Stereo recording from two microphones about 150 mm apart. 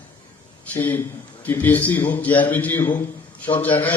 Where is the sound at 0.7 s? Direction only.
15° left (ahead or behind).